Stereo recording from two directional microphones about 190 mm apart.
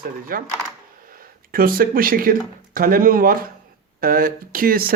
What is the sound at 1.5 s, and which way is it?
Speech, 50° right (ahead or behind).